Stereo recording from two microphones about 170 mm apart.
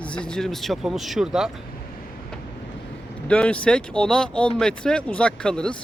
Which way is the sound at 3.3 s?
5° left (ahead or behind).